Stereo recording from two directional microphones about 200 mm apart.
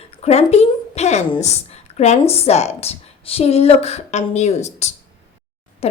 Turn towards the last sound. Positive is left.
turn(degrees=30)  # may be behind; listen again after turning